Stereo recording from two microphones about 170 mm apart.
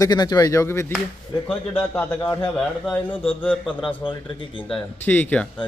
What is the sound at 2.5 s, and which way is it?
Speech, centre (ahead or behind).